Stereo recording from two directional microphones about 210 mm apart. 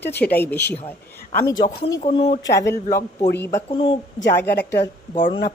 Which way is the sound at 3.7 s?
25° left (ahead or behind).